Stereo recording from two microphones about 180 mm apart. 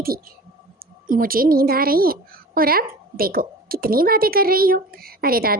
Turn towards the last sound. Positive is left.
turn(degrees=-55)  # may be behind; listen again after turning